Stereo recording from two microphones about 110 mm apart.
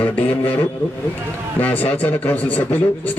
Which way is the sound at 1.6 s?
15° left (ahead or behind).